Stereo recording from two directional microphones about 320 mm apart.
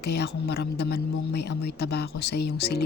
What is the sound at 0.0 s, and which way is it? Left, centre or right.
Speech, left.